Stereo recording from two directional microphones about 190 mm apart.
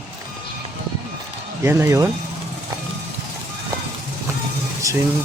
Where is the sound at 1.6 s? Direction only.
15° right (ahead or behind).